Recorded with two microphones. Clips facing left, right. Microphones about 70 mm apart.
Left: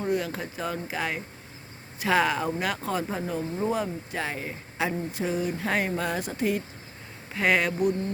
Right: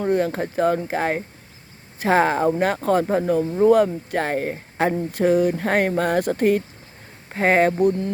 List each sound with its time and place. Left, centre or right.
0.0 s speech: right
7.3 s speech: right